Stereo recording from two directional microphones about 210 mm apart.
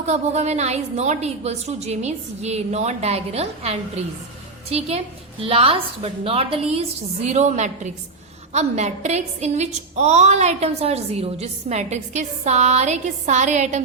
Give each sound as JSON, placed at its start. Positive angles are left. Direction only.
{"t": 0.0, "sound": "a woman's voice", "side_deg": -30}